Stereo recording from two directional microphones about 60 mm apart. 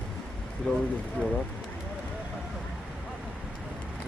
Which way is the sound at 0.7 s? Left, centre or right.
Left.